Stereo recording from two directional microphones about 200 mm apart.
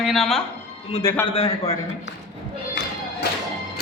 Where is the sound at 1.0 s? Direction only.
15° left (ahead or behind).